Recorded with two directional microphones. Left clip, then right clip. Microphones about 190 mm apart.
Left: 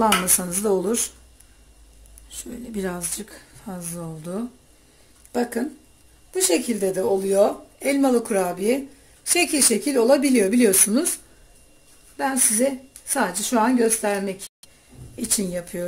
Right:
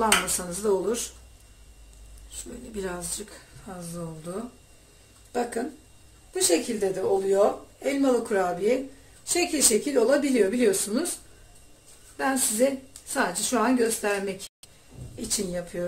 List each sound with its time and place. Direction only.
0.0 s a woman's voice: 50° left (ahead or behind)
2.7 s a woman's voice: 45° left (ahead or behind)
12.2 s speech: 35° left (ahead or behind)
15.1 s a woman's voice: 55° left (ahead or behind)